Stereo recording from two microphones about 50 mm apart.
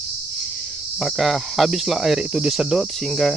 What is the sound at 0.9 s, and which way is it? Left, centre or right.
Cricket, centre.